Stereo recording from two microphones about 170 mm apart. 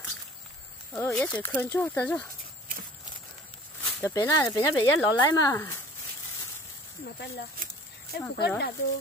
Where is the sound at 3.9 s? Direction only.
20° left (ahead or behind).